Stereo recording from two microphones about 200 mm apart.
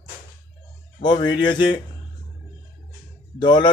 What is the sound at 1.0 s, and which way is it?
Speech, 20° left (ahead or behind).